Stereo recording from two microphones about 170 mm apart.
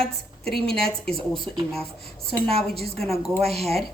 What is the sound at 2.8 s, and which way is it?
A woman's voice, centre (ahead or behind).